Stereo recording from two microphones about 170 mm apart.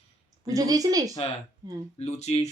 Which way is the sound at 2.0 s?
40° left (ahead or behind).